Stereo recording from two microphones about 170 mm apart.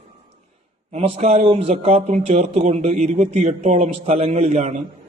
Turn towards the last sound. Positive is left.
turn(degrees=-40)  # may be behind; listen again after turning